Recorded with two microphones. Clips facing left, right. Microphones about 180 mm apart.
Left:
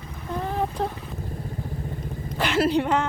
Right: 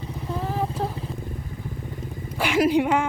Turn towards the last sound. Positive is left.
turn(degrees=-10)  # may be behind; listen again after turning